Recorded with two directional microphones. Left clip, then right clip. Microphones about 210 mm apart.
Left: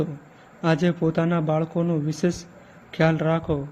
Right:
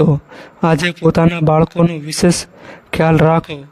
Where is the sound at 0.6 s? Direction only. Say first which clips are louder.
Right 9 dB; 45° right (ahead or behind).